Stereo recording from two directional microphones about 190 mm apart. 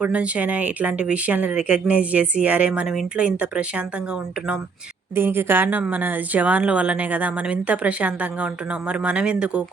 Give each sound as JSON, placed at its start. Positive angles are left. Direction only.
{"t": 0.0, "sound": "speech", "side_deg": -5}